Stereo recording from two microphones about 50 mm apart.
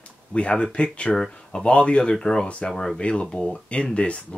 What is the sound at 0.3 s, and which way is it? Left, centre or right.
Speech, left.